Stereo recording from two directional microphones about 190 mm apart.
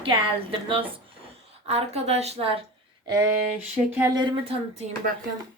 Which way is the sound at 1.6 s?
35° right (ahead or behind).